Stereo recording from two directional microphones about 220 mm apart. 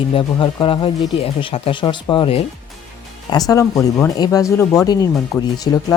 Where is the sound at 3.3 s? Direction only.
15° left (ahead or behind).